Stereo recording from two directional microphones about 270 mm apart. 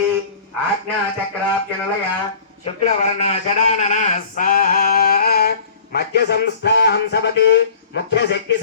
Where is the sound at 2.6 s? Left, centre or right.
Left.